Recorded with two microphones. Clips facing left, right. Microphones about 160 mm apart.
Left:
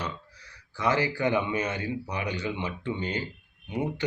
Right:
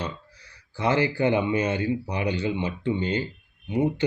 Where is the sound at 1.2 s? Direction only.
60° right (ahead or behind).